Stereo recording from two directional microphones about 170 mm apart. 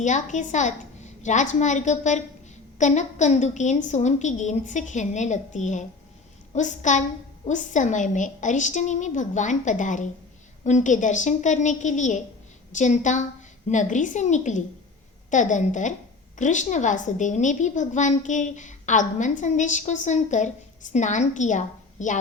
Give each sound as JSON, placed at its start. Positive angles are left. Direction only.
{"t": 0.0, "sound": "a woman's voice", "side_deg": 45}